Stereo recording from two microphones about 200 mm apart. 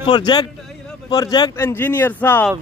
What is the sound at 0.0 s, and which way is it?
A man's voice, 20° left (ahead or behind).